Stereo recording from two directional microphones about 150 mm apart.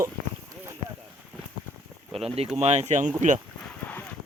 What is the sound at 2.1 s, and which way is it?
Speech, 40° right (ahead or behind).